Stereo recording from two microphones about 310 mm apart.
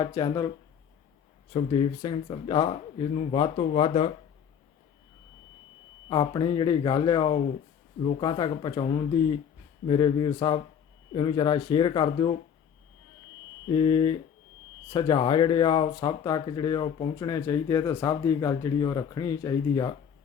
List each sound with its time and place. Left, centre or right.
0.0 s speech: centre
1.5 s speech: centre
6.1 s speech: centre
13.7 s speech: centre